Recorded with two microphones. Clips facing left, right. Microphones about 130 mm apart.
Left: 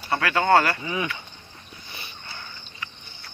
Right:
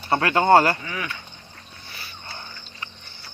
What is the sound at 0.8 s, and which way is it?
Speech, 20° left (ahead or behind).